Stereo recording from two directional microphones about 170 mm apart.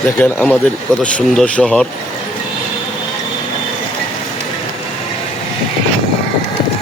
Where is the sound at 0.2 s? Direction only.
10° left (ahead or behind).